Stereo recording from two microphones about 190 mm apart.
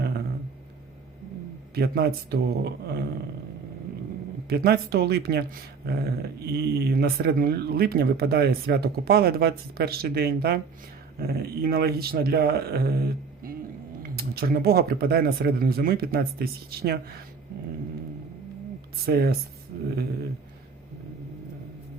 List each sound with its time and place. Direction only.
1.7 s speech: 55° right (ahead or behind)
4.4 s speech: 55° right (ahead or behind)
19.0 s speech: 55° right (ahead or behind)